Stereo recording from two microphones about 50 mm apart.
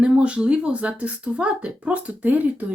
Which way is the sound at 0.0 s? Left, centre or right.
Right.